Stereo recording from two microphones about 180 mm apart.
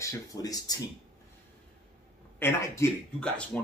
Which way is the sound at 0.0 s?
20° left (ahead or behind).